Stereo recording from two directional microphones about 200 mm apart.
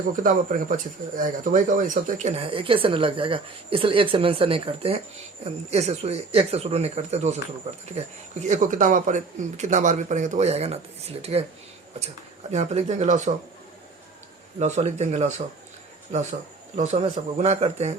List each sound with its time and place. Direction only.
0.7 s speech: 40° right (ahead or behind)
14.6 s speech: 35° right (ahead or behind)
16.7 s speech: 35° right (ahead or behind)